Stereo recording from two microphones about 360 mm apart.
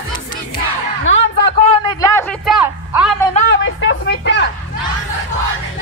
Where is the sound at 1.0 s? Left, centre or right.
Left.